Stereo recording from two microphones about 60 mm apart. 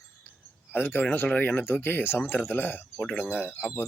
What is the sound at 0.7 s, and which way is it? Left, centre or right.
A man's voice, left.